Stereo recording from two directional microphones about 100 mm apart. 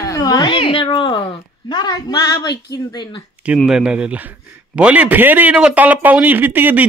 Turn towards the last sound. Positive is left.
turn(degrees=-20)  # may be behind; listen again after turning